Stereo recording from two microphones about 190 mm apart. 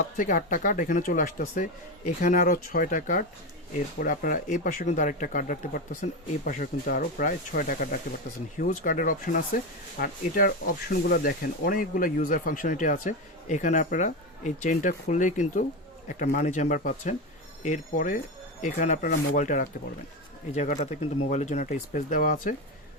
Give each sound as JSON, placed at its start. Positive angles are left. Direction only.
{"t": 0.2, "sound": "speech", "side_deg": 45}